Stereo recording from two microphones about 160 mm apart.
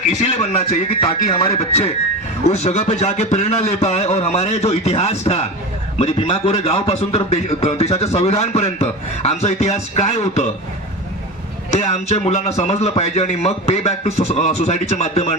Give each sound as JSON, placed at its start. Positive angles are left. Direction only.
{"t": 0.2, "sound": "a man's voice", "side_deg": 40}
{"t": 11.7, "sound": "a man's voice", "side_deg": 45}